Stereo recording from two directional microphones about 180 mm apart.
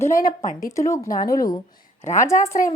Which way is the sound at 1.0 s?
50° left (ahead or behind).